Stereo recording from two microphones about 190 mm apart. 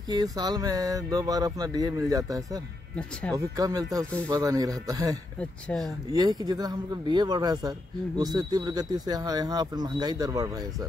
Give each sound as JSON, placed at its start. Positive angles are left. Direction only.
{"t": 0.1, "sound": "speech", "side_deg": -20}
{"t": 5.4, "sound": "speech", "side_deg": 5}
{"t": 6.1, "sound": "speech", "side_deg": -20}